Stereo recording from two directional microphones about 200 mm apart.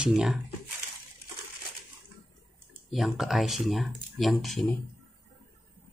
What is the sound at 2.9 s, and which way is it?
Speech, centre (ahead or behind).